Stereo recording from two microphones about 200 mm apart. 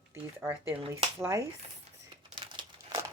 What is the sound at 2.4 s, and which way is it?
Crumpling, 30° right (ahead or behind).